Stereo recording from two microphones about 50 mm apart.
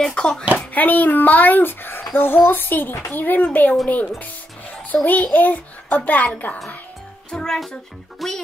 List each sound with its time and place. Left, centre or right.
0.1 s speech: centre
0.6 s a child's voice: left
3.8 s speech: left
5.0 s a child's voice: left
7.2 s music: centre
8.2 s speech: centre